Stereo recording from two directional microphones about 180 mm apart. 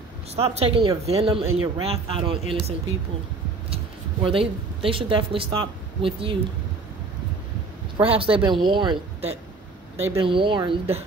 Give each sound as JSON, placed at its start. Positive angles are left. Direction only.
{"t": 0.4, "sound": "speech", "side_deg": -35}
{"t": 3.7, "sound": "speech", "side_deg": -30}
{"t": 8.0, "sound": "speech", "side_deg": -30}